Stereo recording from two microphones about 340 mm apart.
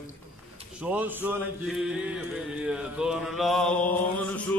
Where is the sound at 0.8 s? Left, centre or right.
Centre.